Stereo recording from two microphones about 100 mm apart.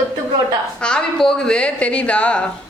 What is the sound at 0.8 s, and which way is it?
A woman's voice, 5° left (ahead or behind).